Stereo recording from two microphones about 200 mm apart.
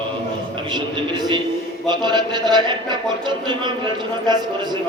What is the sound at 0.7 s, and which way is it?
A man's voice, 25° right (ahead or behind).